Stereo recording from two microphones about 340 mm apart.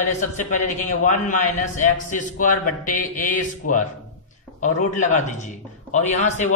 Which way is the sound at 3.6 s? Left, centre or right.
Left.